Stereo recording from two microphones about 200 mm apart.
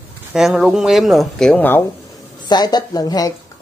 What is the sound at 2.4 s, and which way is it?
Speech, 20° left (ahead or behind).